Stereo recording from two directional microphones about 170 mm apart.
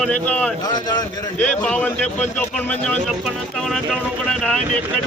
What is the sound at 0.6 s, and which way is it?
Speech, 25° left (ahead or behind).